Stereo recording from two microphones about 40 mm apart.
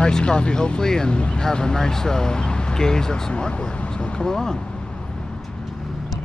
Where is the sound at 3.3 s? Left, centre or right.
Left.